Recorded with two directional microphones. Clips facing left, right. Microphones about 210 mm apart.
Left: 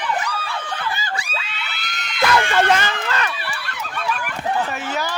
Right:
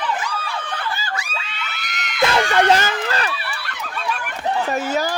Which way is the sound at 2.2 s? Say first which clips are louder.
Right 1 dB; 20° right (ahead or behind).